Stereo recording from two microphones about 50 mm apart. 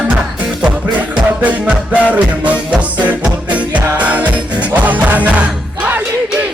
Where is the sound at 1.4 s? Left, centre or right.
Right.